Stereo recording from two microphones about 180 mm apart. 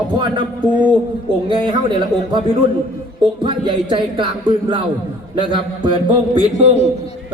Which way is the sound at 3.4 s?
25° right (ahead or behind).